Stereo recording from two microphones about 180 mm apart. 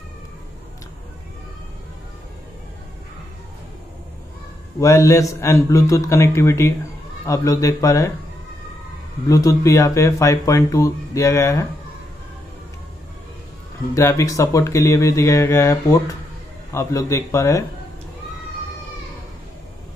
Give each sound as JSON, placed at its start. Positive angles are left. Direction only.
{"t": 4.7, "sound": "speech", "side_deg": 15}
{"t": 9.3, "sound": "speech", "side_deg": 20}
{"t": 13.9, "sound": "speech", "side_deg": 15}